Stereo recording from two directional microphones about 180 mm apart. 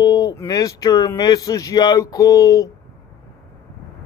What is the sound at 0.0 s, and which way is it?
Speech, 20° left (ahead or behind).